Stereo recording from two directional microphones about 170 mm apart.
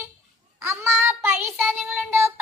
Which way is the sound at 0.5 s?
15° right (ahead or behind).